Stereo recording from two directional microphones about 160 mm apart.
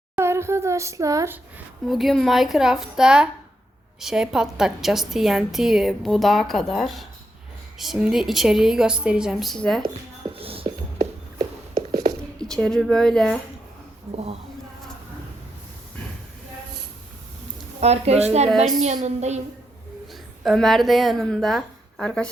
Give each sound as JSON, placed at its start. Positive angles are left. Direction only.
{"t": 0.2, "sound": "speech", "side_deg": -15}
{"t": 1.9, "sound": "a woman's voice", "side_deg": 0}
{"t": 10.3, "sound": "whispering", "side_deg": -35}
{"t": 10.9, "sound": "a sound", "side_deg": -25}
{"t": 12.4, "sound": "a woman's voice", "side_deg": 5}
{"t": 17.7, "sound": "a woman's voice", "side_deg": -40}
{"t": 20.4, "sound": "a woman's voice", "side_deg": 0}